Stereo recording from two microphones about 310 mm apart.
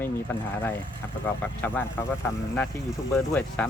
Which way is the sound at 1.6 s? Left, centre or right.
Centre.